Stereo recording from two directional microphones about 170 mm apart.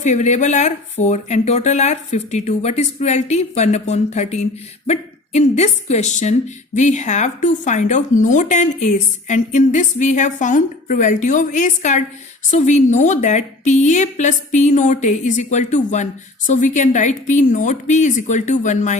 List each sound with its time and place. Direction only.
0.0 s speech: 45° left (ahead or behind)